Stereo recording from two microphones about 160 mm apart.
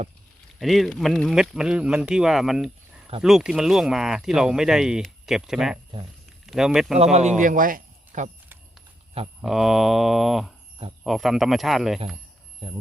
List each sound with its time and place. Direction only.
0.6 s speech: centre (ahead or behind)
7.0 s speech: 45° right (ahead or behind)
9.4 s speech: centre (ahead or behind)
12.6 s speech: 35° right (ahead or behind)